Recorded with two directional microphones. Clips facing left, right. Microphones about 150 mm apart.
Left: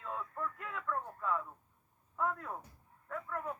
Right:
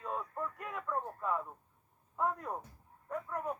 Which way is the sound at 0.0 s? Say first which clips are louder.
Right 2 dB; 15° right (ahead or behind).